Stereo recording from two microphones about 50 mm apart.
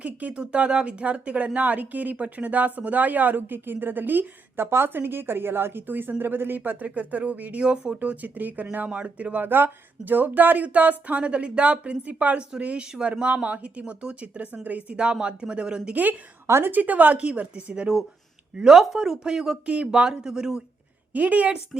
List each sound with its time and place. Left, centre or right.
0.0 s speech: right
6.8 s speech: right
8.1 s speech: right
9.4 s speech: right
14.9 s speech: centre
16.6 s speech: right
18.6 s speech: centre
19.6 s speech: right
21.1 s speech: right